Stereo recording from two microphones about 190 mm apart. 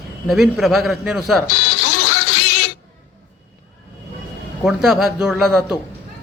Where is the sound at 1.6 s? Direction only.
90° left.